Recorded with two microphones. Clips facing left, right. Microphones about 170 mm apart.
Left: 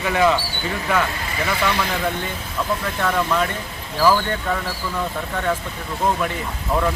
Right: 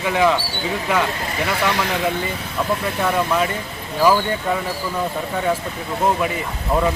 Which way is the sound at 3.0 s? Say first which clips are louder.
Right 1 dB; 10° right (ahead or behind).